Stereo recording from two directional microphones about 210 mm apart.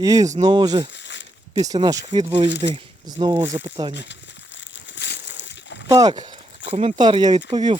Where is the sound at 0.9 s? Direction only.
60° left (ahead or behind).